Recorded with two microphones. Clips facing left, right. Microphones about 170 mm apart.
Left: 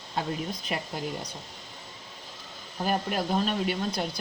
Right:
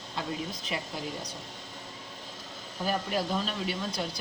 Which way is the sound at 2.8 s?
55° left (ahead or behind).